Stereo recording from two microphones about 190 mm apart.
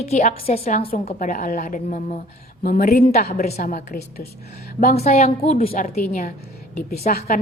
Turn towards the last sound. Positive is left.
turn(degrees=50)  # may be behind; listen again after turning